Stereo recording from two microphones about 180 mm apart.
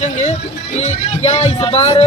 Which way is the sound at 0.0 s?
40° left (ahead or behind).